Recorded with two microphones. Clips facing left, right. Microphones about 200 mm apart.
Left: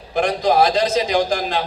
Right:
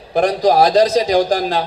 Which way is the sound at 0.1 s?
35° right (ahead or behind).